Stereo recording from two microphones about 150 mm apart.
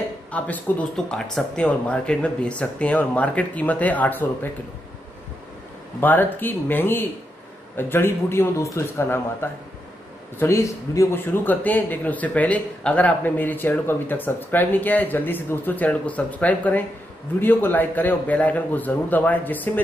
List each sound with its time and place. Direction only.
0.3 s speech: 10° left (ahead or behind)
5.9 s speech: 15° left (ahead or behind)